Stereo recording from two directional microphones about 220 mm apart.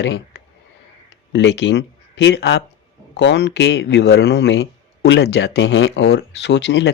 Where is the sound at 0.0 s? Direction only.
55° left (ahead or behind).